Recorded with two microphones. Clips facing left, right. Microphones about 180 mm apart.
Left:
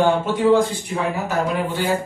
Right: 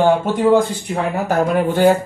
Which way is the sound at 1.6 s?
50° right (ahead or behind).